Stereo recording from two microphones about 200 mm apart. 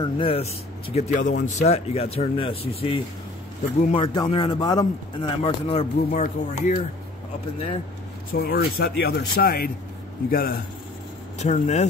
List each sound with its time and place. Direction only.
0.0 s speech: 25° left (ahead or behind)
8.3 s speech: 50° left (ahead or behind)
11.3 s speech: 35° left (ahead or behind)